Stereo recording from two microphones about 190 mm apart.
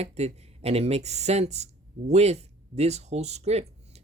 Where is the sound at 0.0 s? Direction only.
35° right (ahead or behind).